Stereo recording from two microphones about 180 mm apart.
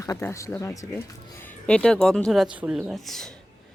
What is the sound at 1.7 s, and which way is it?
Speech, 5° left (ahead or behind).